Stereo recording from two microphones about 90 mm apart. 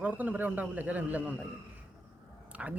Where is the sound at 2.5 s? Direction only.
15° right (ahead or behind).